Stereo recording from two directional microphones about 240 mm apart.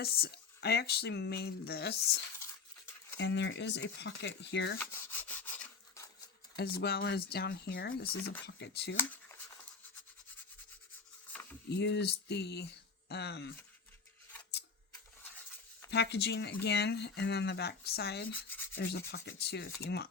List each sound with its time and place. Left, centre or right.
0.0 s speech: left
2.4 s dog: centre
3.2 s speech: left
5.1 s rub: centre
6.6 s speech: left
9.0 s a sound: centre
11.7 s speech: left
15.9 s speech: left